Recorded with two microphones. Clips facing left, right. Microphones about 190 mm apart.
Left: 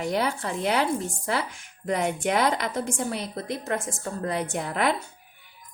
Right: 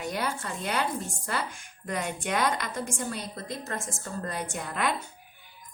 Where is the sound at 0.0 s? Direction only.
65° left (ahead or behind).